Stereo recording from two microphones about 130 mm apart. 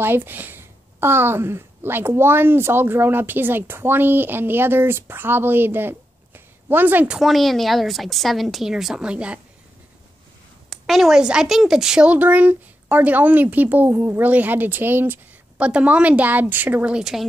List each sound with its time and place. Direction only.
0.0 s speech: 15° right (ahead or behind)
7.2 s a woman's voice: centre (ahead or behind)
10.7 s speech: centre (ahead or behind)